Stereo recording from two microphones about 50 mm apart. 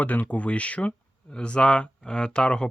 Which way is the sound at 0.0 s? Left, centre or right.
Left.